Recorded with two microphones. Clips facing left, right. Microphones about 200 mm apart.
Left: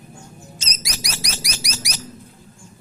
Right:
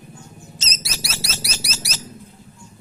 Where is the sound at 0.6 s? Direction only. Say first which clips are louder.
Right 1 dB; 10° left (ahead or behind).